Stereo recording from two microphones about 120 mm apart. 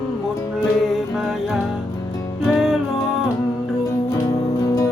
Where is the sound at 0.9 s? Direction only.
Centre (ahead or behind).